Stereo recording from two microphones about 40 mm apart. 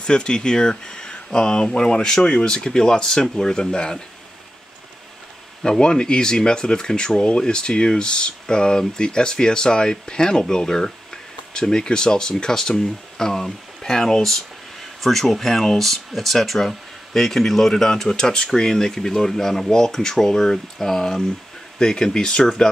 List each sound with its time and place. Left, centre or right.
0.0 s speech: left
5.6 s speech: left